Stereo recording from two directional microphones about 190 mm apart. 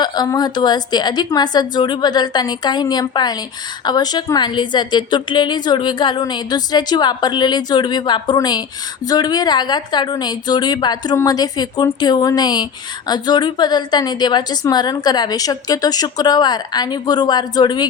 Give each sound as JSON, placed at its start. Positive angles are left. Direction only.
{"t": 0.0, "sound": "a woman's voice", "side_deg": 20}